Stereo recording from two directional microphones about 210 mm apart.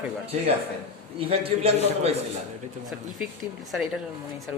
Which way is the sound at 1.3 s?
30° right (ahead or behind).